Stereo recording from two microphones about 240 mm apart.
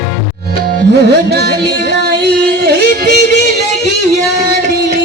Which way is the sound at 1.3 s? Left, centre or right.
Right.